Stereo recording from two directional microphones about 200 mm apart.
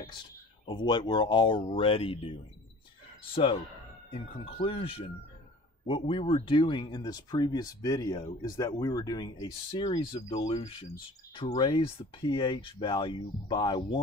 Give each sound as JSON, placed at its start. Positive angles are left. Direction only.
{"t": 0.7, "sound": "speech", "side_deg": 20}
{"t": 4.1, "sound": "speech", "side_deg": 30}